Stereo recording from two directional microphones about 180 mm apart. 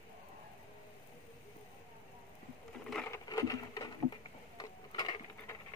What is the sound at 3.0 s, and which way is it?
Patter, 20° left (ahead or behind).